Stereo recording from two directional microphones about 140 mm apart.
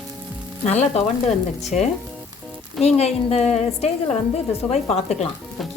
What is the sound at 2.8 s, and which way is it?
A woman's voice, 50° left (ahead or behind).